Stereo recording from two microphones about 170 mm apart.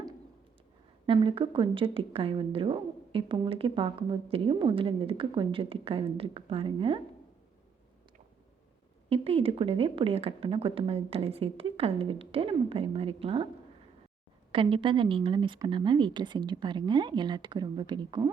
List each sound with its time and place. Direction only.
1.0 s a woman's voice: 30° right (ahead or behind)
9.0 s a woman's voice: 35° right (ahead or behind)
14.5 s speech: 30° right (ahead or behind)